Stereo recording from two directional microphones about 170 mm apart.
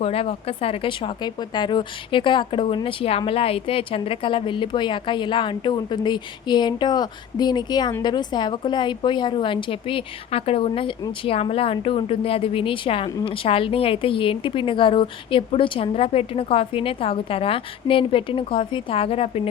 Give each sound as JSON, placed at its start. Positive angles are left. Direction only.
{"t": 0.0, "sound": "a woman's voice", "side_deg": 35}